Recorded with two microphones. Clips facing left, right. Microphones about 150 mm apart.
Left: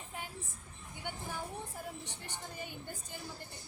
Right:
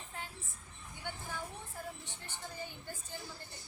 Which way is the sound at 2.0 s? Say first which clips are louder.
Left 1 dB; 15° left (ahead or behind).